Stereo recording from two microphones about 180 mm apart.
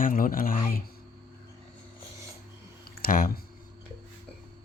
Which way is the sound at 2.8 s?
55° left (ahead or behind).